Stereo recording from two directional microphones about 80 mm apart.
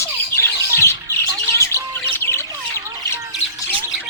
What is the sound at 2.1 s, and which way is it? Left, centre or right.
Squawk, left.